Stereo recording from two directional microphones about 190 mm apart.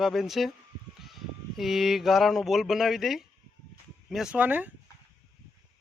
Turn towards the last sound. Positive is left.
turn(degrees=-10)  # may be behind; listen again after turning